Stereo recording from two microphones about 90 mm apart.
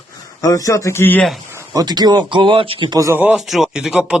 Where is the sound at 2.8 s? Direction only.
40° right (ahead or behind).